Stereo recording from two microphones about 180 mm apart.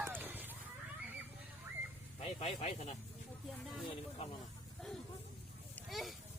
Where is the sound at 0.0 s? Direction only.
10° right (ahead or behind).